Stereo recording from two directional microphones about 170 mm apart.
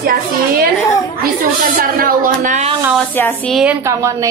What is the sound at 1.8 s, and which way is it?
Speech, 55° right (ahead or behind).